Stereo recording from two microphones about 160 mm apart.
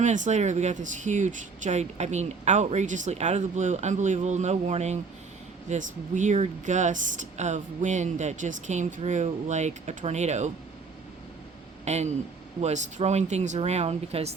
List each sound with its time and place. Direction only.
0.0 s speech: 50° right (ahead or behind)
11.9 s speech: 45° right (ahead or behind)